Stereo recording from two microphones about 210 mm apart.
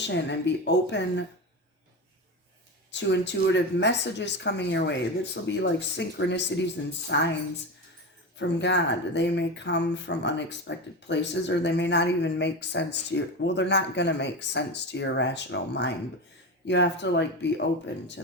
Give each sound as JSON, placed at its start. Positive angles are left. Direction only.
{"t": 0.0, "sound": "speech", "side_deg": 55}
{"t": 2.9, "sound": "speech", "side_deg": 55}
{"t": 8.4, "sound": "speech", "side_deg": 55}